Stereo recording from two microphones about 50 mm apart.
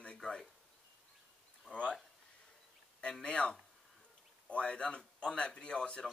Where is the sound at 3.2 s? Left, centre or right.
Left.